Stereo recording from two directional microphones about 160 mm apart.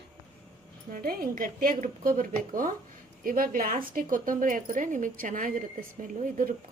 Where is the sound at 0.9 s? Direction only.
65° right (ahead or behind).